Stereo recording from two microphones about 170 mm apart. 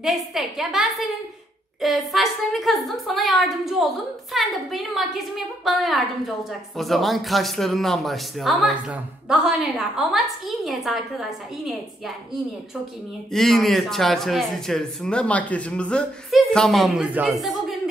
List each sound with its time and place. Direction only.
0.0 s speech: centre (ahead or behind)
13.3 s speech: centre (ahead or behind)